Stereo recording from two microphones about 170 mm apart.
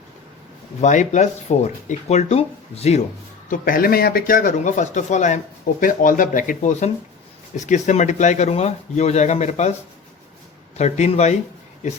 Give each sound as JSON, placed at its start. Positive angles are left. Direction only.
{"t": 0.8, "sound": "speech", "side_deg": 45}
{"t": 3.5, "sound": "speech", "side_deg": 60}
{"t": 10.8, "sound": "speech", "side_deg": 40}